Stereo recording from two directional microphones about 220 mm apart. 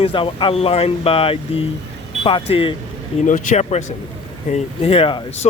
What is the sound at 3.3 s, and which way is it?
Speech, 35° left (ahead or behind).